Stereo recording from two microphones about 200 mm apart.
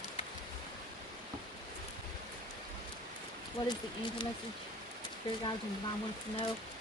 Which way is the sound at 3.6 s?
25° left (ahead or behind).